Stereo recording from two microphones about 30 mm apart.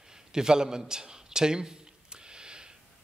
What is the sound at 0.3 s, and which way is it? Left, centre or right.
A man's voice, right.